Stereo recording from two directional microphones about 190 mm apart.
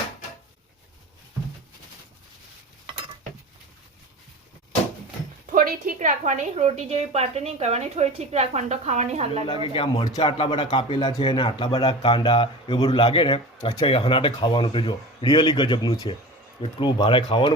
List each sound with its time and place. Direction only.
5.5 s a woman's voice: 45° right (ahead or behind)
9.7 s speech: 25° left (ahead or behind)